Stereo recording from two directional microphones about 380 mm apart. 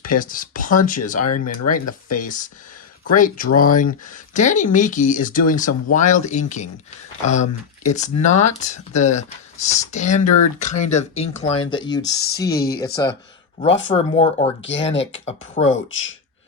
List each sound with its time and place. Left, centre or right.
0.1 s speech: left
1.2 s speech: left
3.2 s speech: left
7.9 s speech: centre
12.0 s speech: left
12.4 s speech: centre
14.6 s speech: left
14.8 s speech: centre
15.7 s speech: left